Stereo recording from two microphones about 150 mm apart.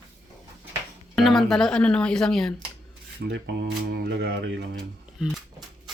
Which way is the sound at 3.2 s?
90° right.